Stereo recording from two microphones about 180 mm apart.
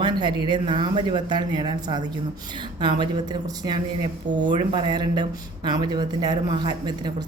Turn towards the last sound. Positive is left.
turn(degrees=-25)  # may be behind; listen again after turning